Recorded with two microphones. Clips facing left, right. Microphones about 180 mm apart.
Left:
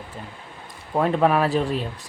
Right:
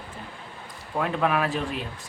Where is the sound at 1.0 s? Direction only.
35° left (ahead or behind).